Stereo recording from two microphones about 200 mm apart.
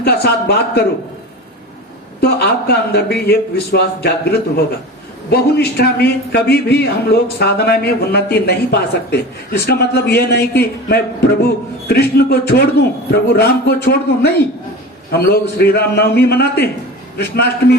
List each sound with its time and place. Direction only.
0.0 s a man's voice: 55° left (ahead or behind)
2.2 s a man's voice: 55° left (ahead or behind)